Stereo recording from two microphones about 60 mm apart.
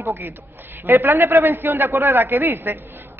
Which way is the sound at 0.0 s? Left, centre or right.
Right.